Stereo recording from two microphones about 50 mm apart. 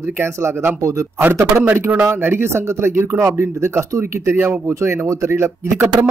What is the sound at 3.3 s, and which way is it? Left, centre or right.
Speech, right.